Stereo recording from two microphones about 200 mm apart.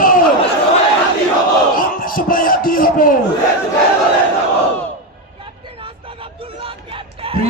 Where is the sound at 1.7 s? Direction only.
45° left (ahead or behind).